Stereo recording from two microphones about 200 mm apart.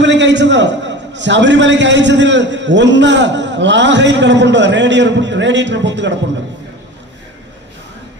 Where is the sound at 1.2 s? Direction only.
65° right (ahead or behind).